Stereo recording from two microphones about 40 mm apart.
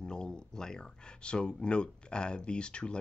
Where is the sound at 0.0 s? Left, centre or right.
Centre.